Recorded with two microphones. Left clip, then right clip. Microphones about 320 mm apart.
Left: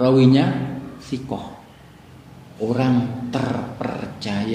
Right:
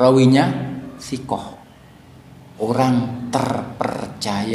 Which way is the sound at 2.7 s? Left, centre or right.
Centre.